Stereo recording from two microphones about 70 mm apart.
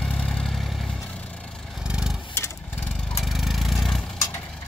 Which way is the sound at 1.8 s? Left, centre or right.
Centre.